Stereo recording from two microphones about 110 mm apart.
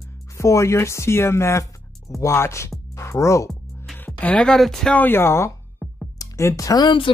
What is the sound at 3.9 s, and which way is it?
Speech, 15° left (ahead or behind).